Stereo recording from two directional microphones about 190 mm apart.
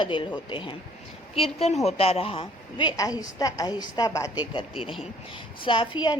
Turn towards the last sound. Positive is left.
turn(degrees=25)  # may be behind; listen again after turning